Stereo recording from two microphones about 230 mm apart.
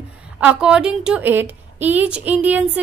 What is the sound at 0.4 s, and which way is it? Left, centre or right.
A woman's voice, centre.